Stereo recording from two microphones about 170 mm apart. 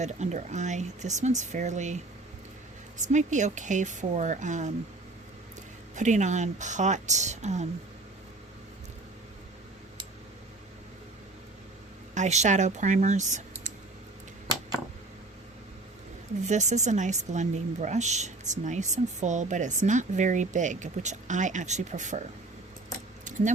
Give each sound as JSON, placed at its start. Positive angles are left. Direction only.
{"t": 0.0, "sound": "a woman's voice", "side_deg": -45}
{"t": 3.0, "sound": "a woman's voice", "side_deg": -45}
{"t": 6.0, "sound": "a woman's voice", "side_deg": -45}
{"t": 12.1, "sound": "a woman's voice", "side_deg": -45}
{"t": 16.5, "sound": "a woman's voice", "side_deg": -45}
{"t": 23.2, "sound": "keys jangling", "side_deg": -45}